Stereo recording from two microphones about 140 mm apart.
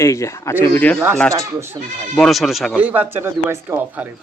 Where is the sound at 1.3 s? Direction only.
20° right (ahead or behind).